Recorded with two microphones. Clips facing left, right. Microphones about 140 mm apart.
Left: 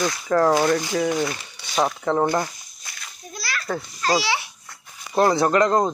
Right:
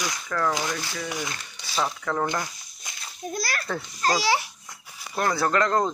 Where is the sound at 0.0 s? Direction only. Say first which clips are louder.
Left 8 dB; 35° left (ahead or behind).